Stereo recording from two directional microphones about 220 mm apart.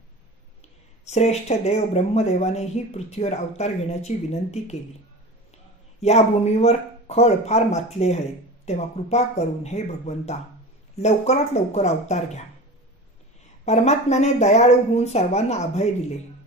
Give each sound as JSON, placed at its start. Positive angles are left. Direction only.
{"t": 1.0, "sound": "speech", "side_deg": 30}
{"t": 5.9, "sound": "speech", "side_deg": 30}
{"t": 13.7, "sound": "speech", "side_deg": 30}